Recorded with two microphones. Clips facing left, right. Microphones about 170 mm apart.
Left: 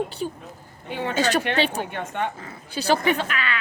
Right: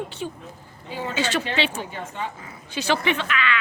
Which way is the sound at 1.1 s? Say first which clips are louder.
Left 3 dB; 40° left (ahead or behind).